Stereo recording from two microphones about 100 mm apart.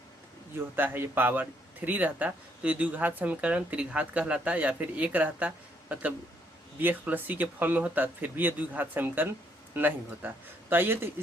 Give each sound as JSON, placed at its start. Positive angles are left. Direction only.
{"t": 0.8, "sound": "speech", "side_deg": -20}